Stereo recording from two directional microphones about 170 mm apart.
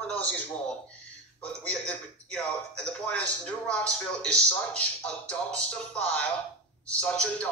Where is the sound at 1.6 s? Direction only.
5° left (ahead or behind).